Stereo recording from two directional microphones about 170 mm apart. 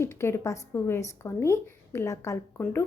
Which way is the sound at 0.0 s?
15° left (ahead or behind).